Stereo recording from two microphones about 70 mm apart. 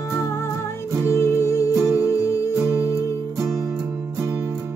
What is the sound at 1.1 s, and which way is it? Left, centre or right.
Music, left.